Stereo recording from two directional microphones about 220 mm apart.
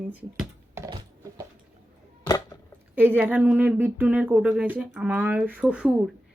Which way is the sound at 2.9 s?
10° right (ahead or behind).